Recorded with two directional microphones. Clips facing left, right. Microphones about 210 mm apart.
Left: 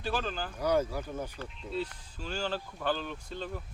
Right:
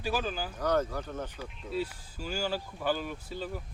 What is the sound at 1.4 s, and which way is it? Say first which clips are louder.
Speech: right 1 dB; 10° right (ahead or behind).